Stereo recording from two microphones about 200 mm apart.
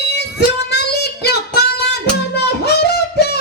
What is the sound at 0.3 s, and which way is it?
Child singing, 55° left (ahead or behind).